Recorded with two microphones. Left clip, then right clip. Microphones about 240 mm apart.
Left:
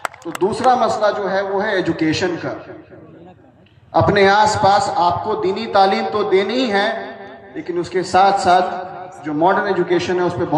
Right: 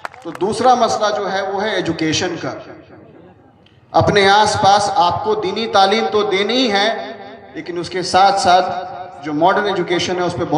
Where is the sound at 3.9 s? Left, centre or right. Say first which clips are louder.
Right 1 dB; right.